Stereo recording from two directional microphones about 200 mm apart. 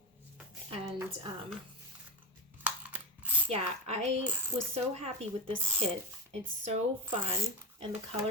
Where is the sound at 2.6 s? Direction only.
10° right (ahead or behind).